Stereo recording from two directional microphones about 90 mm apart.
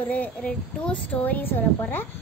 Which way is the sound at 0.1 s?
15° left (ahead or behind).